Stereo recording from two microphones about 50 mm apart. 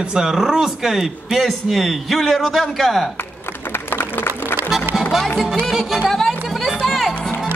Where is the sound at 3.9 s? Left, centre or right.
Left.